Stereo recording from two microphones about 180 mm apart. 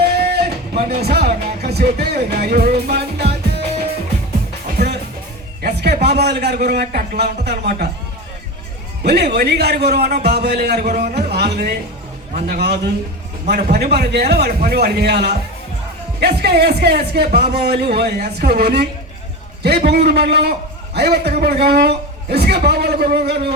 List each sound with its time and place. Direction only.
0.2 s a sound: 60° right (ahead or behind)
1.0 s music: 60° right (ahead or behind)
5.6 s a man's voice: 60° right (ahead or behind)
9.0 s a man's voice: 65° right (ahead or behind)